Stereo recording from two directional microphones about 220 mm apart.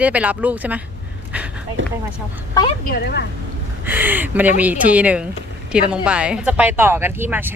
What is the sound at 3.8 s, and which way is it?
Speech, 10° right (ahead or behind).